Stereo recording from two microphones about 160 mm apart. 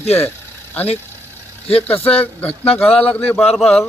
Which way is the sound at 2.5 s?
40° left (ahead or behind).